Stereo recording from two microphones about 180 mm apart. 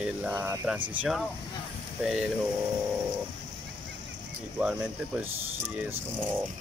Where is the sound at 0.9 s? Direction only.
5° right (ahead or behind).